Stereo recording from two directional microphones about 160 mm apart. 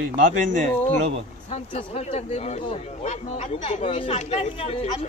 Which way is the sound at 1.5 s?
45° left (ahead or behind).